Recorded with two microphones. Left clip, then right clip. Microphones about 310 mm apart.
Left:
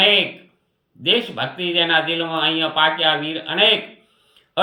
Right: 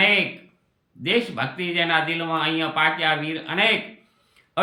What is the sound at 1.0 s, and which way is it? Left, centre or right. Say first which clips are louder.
Speech: left 4 dB; centre.